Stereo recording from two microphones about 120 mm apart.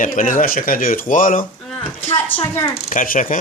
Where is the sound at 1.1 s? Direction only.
90° left.